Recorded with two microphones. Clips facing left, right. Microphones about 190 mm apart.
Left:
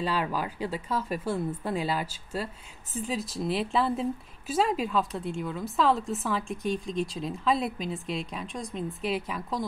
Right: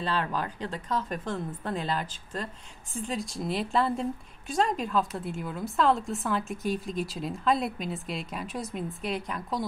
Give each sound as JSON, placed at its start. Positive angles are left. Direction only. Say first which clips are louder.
{"t": 0.0, "sound": "a woman's voice", "louder": "left 1 dB", "side_deg": 10}